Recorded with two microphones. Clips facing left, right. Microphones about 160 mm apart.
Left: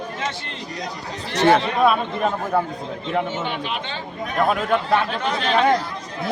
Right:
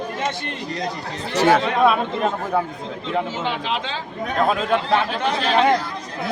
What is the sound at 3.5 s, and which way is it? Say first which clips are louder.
Speech: right 2 dB; 90° right.